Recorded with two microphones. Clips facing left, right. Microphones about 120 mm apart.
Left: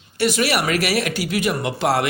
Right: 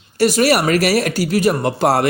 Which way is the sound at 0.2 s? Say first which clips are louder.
Right 6 dB; 40° right (ahead or behind).